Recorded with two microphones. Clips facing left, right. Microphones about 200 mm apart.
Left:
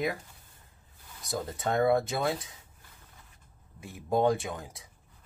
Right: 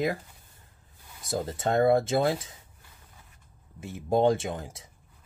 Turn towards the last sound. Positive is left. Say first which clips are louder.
# right 3 dB
turn(degrees=-25)  # may be behind; listen again after turning